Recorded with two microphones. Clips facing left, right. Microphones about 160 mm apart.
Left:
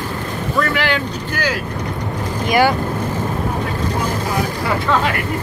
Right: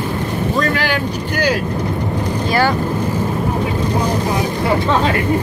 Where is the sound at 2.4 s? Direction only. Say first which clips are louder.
Left 2 dB; 15° left (ahead or behind).